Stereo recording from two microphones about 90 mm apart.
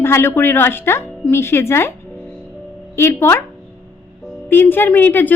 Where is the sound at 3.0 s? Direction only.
30° left (ahead or behind).